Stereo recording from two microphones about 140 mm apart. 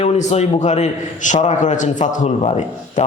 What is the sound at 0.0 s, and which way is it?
A man's voice, 55° left (ahead or behind).